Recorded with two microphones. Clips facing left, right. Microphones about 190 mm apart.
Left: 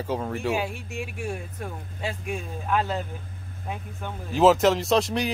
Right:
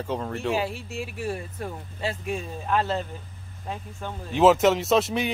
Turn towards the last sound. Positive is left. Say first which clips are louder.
# right 1 dB
turn(degrees=0)  # may be behind; listen again after turning